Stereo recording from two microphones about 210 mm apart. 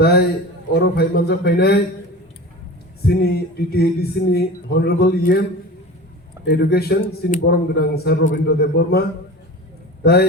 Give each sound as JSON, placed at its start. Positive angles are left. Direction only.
{"t": 0.0, "sound": "a man's voice", "side_deg": 50}
{"t": 3.0, "sound": "a man's voice", "side_deg": 50}
{"t": 6.4, "sound": "a man's voice", "side_deg": 50}